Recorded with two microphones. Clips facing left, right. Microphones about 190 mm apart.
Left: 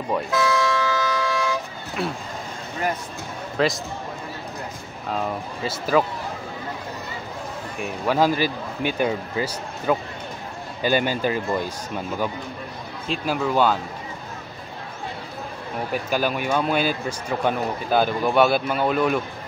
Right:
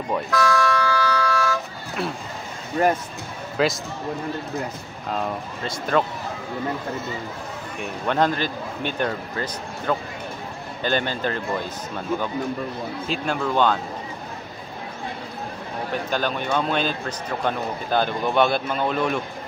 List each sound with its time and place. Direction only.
0.3 s car alarm: 20° left (ahead or behind)
2.0 s speech: centre (ahead or behind)
3.5 s a man's voice: centre (ahead or behind)
5.1 s speech: 5° left (ahead or behind)
7.8 s a man's voice: 5° left (ahead or behind)
13.1 s speech: 5° left (ahead or behind)
15.9 s a man's voice: 10° left (ahead or behind)